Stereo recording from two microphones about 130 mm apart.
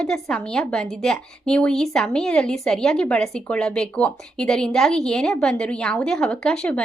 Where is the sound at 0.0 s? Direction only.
5° left (ahead or behind).